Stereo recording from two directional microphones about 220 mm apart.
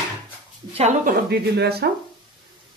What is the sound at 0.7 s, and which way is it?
Speech, 35° right (ahead or behind).